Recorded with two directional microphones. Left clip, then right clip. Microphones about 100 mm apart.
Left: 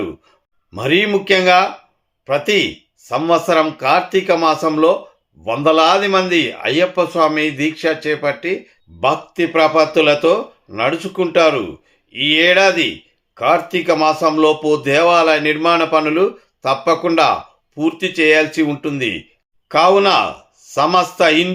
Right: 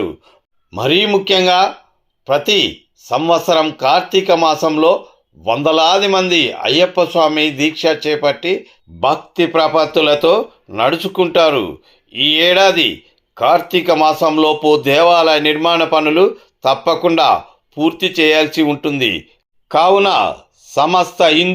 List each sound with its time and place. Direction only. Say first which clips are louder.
0.8 s speech: right 2 dB; 25° right (ahead or behind)
1.0 s speech: left 1 dB; 15° right (ahead or behind)